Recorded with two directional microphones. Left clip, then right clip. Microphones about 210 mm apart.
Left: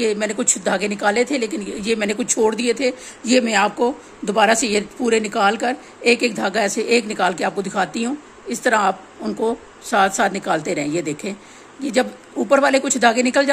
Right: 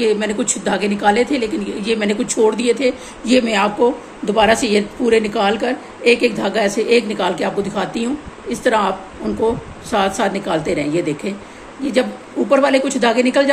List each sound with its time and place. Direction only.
0.0 s speech: 55° left (ahead or behind)